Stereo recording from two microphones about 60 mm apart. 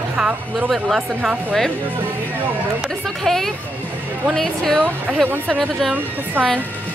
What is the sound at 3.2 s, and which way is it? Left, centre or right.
Speech, centre.